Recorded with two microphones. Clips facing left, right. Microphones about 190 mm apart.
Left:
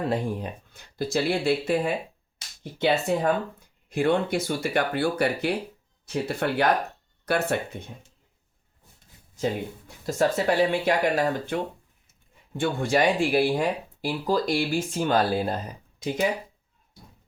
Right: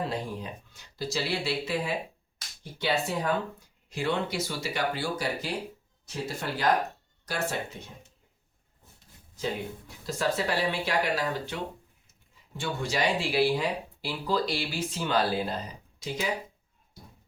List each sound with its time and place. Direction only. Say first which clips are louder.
0.0 s speech: left 6 dB; 55° left (ahead or behind)
9.4 s speech: left 5 dB; 50° left (ahead or behind)